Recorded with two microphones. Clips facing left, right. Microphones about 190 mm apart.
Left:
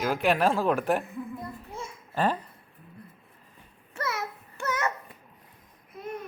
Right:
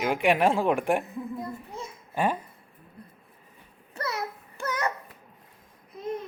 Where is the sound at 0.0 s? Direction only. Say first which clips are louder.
Right 1 dB; 15° right (ahead or behind).